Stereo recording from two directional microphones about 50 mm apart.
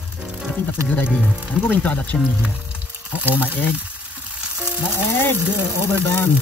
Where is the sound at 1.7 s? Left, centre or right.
Left.